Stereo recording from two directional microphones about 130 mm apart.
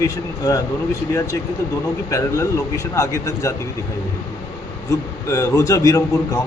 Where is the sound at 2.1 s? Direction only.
25° left (ahead or behind).